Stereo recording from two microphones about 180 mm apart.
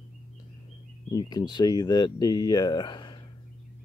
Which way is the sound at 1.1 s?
20° left (ahead or behind).